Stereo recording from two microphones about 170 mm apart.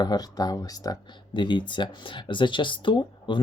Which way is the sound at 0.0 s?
25° left (ahead or behind).